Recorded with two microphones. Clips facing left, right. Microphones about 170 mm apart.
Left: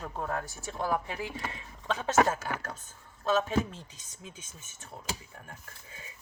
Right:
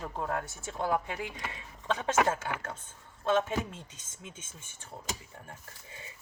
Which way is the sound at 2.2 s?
25° right (ahead or behind).